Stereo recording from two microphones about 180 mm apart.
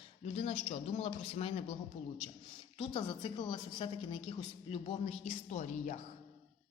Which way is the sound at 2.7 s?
30° left (ahead or behind).